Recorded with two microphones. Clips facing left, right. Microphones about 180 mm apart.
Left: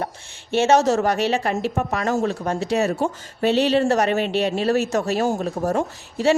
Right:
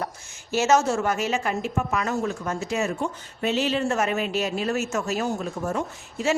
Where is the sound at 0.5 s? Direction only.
30° left (ahead or behind).